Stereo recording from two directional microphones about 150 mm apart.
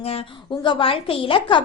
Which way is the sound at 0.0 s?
40° left (ahead or behind).